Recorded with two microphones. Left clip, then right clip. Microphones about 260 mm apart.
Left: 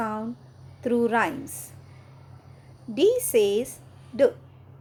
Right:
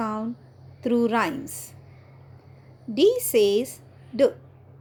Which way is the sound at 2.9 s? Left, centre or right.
Right.